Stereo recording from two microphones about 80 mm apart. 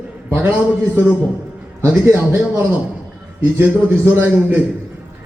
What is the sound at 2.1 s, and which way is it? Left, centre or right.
A man's voice, right.